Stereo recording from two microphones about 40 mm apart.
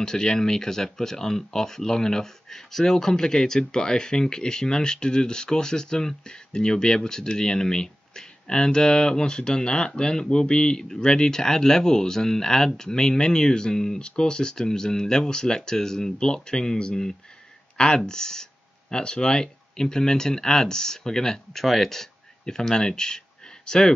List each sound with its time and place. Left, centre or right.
0.0 s speech: centre
9.2 s speech: left